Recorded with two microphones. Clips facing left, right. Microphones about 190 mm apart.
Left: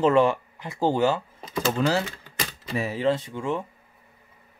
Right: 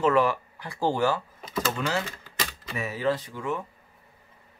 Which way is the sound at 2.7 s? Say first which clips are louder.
Left 3 dB; 30° left (ahead or behind).